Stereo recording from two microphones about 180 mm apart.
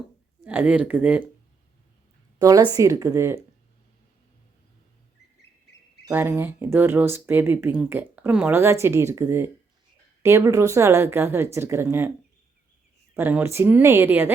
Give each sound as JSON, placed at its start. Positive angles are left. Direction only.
{"t": 0.4, "sound": "speech", "side_deg": -5}
{"t": 2.4, "sound": "a woman's voice", "side_deg": -20}
{"t": 6.1, "sound": "speech", "side_deg": -10}
{"t": 13.1, "sound": "speech", "side_deg": -10}